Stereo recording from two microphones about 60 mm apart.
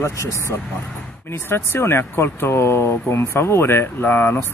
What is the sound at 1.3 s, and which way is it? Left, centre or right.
Speech, left.